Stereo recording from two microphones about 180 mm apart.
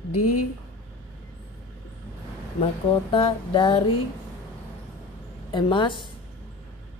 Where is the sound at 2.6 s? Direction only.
30° left (ahead or behind).